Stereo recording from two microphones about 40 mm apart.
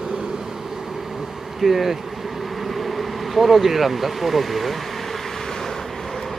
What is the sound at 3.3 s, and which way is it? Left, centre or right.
Speech, centre.